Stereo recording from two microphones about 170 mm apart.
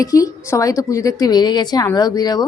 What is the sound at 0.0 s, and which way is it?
A woman's voice, 20° left (ahead or behind).